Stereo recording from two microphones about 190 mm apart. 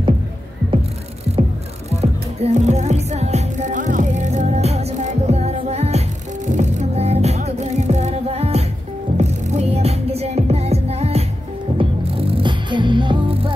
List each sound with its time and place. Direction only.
1.9 s music: 35° right (ahead or behind)